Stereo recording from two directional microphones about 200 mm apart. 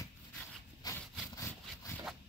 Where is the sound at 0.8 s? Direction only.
20° left (ahead or behind).